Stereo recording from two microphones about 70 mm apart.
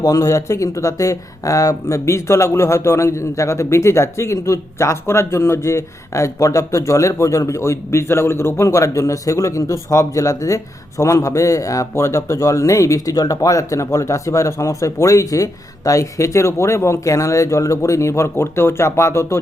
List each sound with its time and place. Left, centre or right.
0.0 s speech: left